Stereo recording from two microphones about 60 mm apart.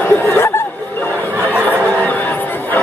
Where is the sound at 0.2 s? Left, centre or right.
Left.